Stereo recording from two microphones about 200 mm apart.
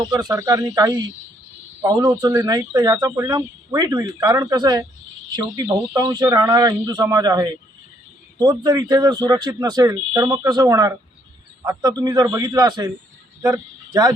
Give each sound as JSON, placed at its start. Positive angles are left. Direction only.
{"t": 0.0, "sound": "speech", "side_deg": -20}